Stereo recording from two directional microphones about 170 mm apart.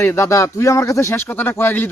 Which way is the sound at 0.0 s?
15° left (ahead or behind).